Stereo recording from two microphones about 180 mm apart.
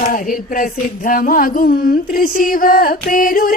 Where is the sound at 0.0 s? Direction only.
50° left (ahead or behind).